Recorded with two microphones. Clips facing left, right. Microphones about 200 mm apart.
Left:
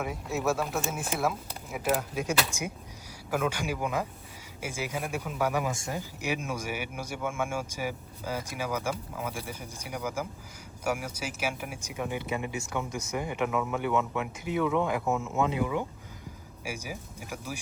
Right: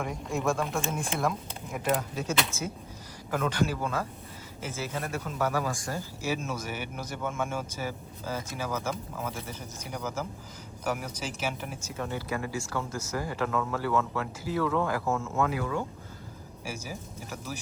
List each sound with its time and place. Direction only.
0.0 s speech: 5° left (ahead or behind)